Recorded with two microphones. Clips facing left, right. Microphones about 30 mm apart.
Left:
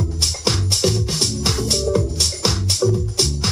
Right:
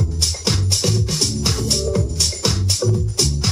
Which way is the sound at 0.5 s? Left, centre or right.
Centre.